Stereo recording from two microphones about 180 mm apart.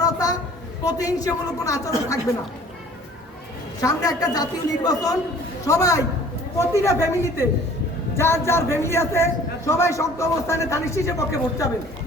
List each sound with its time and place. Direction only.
0.0 s a sound: 20° left (ahead or behind)
0.9 s a woman's voice: 20° left (ahead or behind)
3.8 s a woman's voice: 20° left (ahead or behind)